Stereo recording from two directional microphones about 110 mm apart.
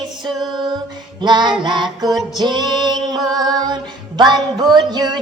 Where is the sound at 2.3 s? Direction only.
40° right (ahead or behind).